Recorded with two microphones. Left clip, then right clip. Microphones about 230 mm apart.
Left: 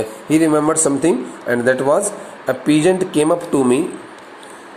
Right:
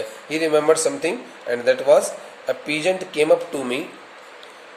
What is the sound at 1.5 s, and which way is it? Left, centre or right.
Speech, centre.